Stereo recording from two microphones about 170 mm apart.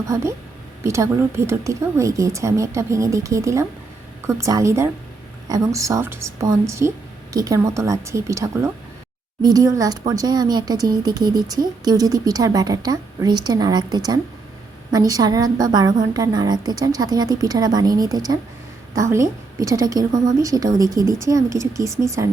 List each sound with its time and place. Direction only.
0.1 s a woman's voice: 15° right (ahead or behind)